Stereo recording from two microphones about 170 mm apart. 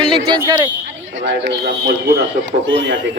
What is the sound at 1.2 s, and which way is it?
Speech, 80° right.